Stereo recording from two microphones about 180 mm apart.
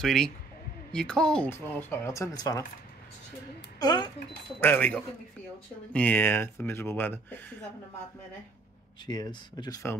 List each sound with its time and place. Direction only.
0.0 s speech: 5° left (ahead or behind); by 2.6 s 20° left (ahead or behind)
3.8 s speech: 20° left (ahead or behind)
4.6 s speech: 10° left (ahead or behind)
9.1 s speech: 20° left (ahead or behind)